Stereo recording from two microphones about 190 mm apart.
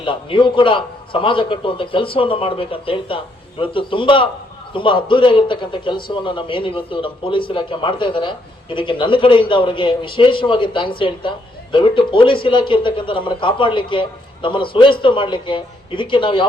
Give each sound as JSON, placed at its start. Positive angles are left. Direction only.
{"t": 0.0, "sound": "a man's voice", "side_deg": 25}